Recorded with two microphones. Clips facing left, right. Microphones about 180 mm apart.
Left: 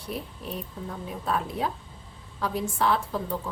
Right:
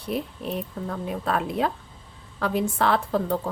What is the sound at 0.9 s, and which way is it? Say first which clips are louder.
A woman's voice: right 3 dB; 70° right (ahead or behind).